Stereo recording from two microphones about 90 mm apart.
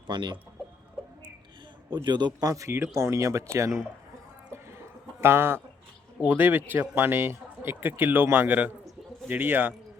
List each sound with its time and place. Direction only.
0.1 s speech: 55° right (ahead or behind)
2.0 s speech: 55° right (ahead or behind); by 3.7 s 35° right (ahead or behind)
5.2 s speech: 25° right (ahead or behind)